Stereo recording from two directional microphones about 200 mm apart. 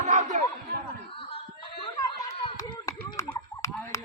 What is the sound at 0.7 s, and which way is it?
Snicker, 50° right (ahead or behind).